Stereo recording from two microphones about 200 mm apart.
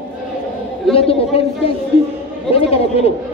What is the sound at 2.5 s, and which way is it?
Speech, 30° left (ahead or behind).